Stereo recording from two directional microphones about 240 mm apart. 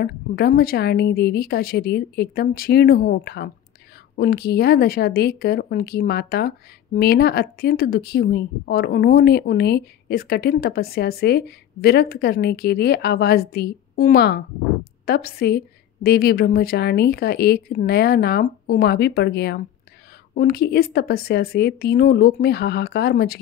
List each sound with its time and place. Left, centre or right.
0.0 s speech: left